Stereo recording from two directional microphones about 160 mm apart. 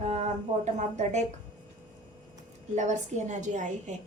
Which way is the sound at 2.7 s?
50° right (ahead or behind).